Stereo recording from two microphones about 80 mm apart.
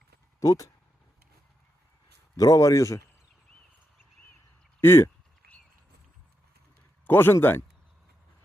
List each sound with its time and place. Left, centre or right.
0.3 s speech: left
2.3 s a man's voice: left
4.8 s speech: left
7.1 s speech: left